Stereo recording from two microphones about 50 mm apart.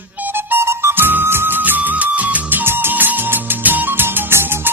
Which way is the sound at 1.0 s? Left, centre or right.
Right.